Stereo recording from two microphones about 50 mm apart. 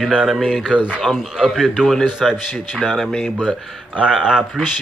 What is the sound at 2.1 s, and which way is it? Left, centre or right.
Speech, centre.